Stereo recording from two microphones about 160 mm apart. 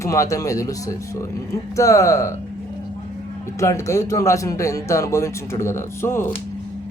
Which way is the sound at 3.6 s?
20° left (ahead or behind).